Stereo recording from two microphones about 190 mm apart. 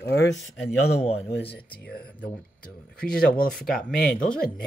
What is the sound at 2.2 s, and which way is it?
Speech, 5° left (ahead or behind).